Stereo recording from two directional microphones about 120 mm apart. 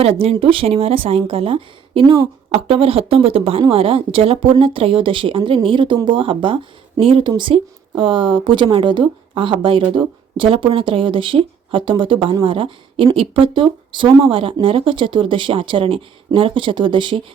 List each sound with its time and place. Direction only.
0.0 s speech: 55° right (ahead or behind)